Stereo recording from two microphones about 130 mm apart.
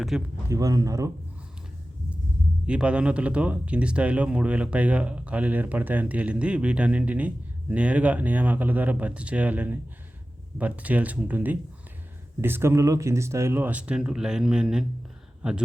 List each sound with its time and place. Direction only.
0.1 s speech: 5° right (ahead or behind)
0.4 s speech: 25° right (ahead or behind)
2.6 s speech: 10° right (ahead or behind)